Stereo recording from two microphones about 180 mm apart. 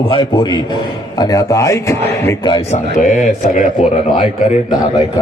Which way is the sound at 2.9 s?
45° left (ahead or behind).